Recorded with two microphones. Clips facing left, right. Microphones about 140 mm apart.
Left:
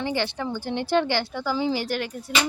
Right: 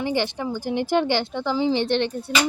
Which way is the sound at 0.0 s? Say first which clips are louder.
Right 2 dB; 15° right (ahead or behind).